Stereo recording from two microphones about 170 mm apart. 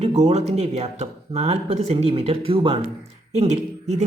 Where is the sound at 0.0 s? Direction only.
40° right (ahead or behind).